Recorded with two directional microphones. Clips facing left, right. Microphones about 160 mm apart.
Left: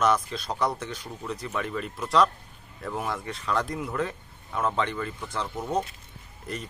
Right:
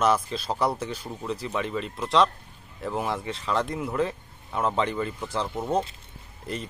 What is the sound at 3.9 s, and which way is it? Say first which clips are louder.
Speech: right 3 dB; 30° right (ahead or behind).